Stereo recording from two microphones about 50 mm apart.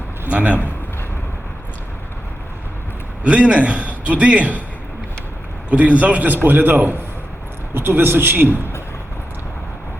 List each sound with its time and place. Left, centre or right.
0.3 s a man's voice: right
3.2 s a man's voice: right
5.7 s a man's voice: right